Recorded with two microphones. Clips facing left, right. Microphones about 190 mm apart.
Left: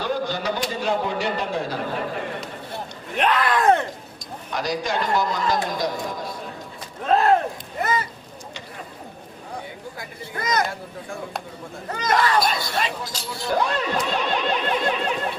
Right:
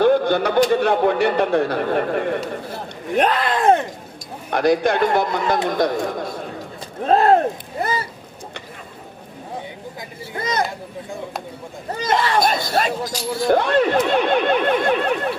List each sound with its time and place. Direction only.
0.0 s a man's voice: 60° right (ahead or behind)
3.2 s speech: 40° right (ahead or behind)
3.4 s speech: 25° right (ahead or behind)
4.5 s a man's voice: 60° right (ahead or behind)
7.0 s speech: 35° right (ahead or behind)
7.8 s a sound: 30° right (ahead or behind)
10.0 s speech: 25° right (ahead or behind)
11.9 s speech: 30° right (ahead or behind)
12.4 s speech: 45° right (ahead or behind)
13.1 s speech: 10° right (ahead or behind)
13.5 s a man's voice: 60° right (ahead or behind)